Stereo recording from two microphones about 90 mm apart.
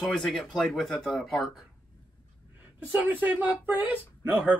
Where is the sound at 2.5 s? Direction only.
20° right (ahead or behind).